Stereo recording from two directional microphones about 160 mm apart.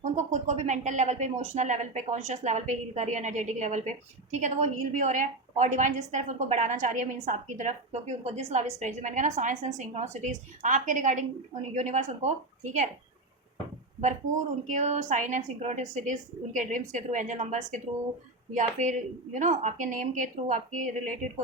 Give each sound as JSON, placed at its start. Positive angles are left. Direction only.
{"t": 0.0, "sound": "a woman's voice", "side_deg": -50}
{"t": 14.7, "sound": "a woman's voice", "side_deg": -50}